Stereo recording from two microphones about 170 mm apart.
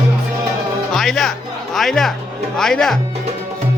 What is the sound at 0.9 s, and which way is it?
Music, centre (ahead or behind).